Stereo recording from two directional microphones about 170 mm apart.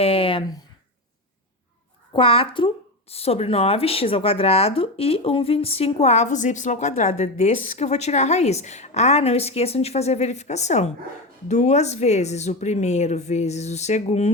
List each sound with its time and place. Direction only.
0.0 s speech: 35° left (ahead or behind)
2.1 s speech: 30° left (ahead or behind)